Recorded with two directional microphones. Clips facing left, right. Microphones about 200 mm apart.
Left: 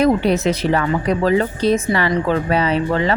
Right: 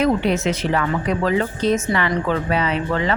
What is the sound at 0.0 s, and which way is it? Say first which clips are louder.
Speech: left 3 dB; 35° left (ahead or behind).